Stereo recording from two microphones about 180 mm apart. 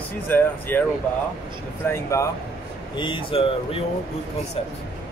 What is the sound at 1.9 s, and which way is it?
Speech, 15° left (ahead or behind).